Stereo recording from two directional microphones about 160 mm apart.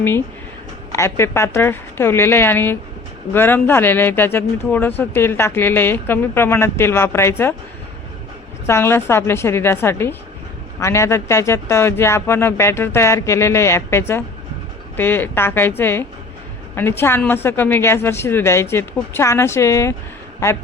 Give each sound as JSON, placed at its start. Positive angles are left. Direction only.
{"t": 0.9, "sound": "speech", "side_deg": 15}
{"t": 8.6, "sound": "a man's voice", "side_deg": 15}